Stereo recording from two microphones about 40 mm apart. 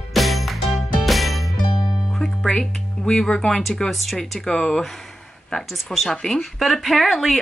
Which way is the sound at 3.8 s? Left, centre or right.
Centre.